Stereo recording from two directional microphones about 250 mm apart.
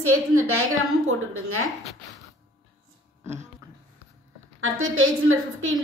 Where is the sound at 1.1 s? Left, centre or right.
Right.